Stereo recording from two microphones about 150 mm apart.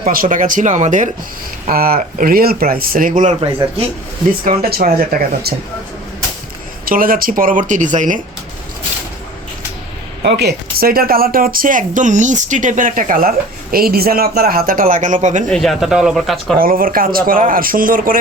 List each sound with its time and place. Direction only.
0.1 s speech: 65° right (ahead or behind)
1.6 s speech: 75° right (ahead or behind)
4.4 s speech: 75° right (ahead or behind)
6.8 s speech: 70° right (ahead or behind)
10.2 s speech: 90° right; by 15.4 s 55° right (ahead or behind)
15.4 s speech: 5° left (ahead or behind)
16.6 s speech: 75° right (ahead or behind)